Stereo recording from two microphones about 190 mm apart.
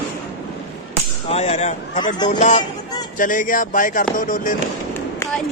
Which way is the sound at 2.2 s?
40° left (ahead or behind).